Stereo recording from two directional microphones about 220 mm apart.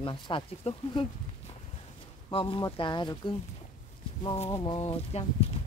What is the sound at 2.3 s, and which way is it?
Speech, 25° left (ahead or behind).